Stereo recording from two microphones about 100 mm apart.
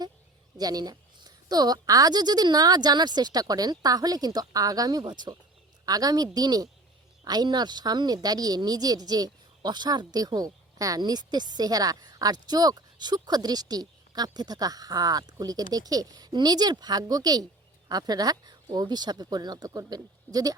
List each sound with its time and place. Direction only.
0.5 s a woman's voice: 40° right (ahead or behind)